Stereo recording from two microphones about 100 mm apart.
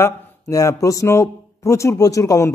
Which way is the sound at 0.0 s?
35° left (ahead or behind).